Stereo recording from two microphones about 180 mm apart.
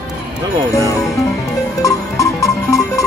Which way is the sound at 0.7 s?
20° left (ahead or behind).